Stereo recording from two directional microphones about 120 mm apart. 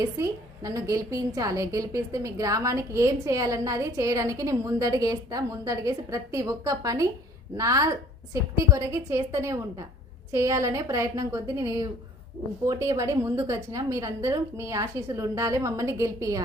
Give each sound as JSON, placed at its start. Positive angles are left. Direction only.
{"t": 0.0, "sound": "a woman's voice", "side_deg": -25}